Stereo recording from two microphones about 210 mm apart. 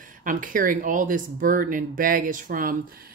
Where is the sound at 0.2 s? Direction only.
40° right (ahead or behind).